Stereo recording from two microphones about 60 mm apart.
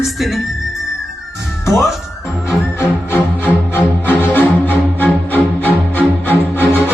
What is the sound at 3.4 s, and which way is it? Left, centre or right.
Music, left.